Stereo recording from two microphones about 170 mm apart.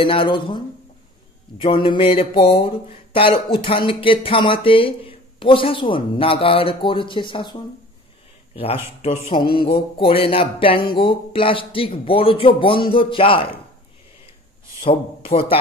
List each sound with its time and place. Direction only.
0.0 s speech: 30° left (ahead or behind)
9.0 s speech: 30° left (ahead or behind)
14.9 s speech: 35° left (ahead or behind)